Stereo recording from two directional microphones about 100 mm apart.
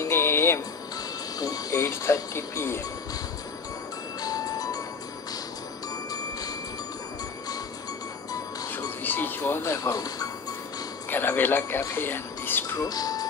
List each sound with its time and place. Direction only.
0.0 s music: 25° left (ahead or behind)
1.4 s speech: 35° left (ahead or behind)
4.2 s music: 40° left (ahead or behind)
8.7 s music: 20° left (ahead or behind); by 10.3 s 40° left (ahead or behind)
11.1 s speech: 20° left (ahead or behind)
12.7 s speech: 40° left (ahead or behind)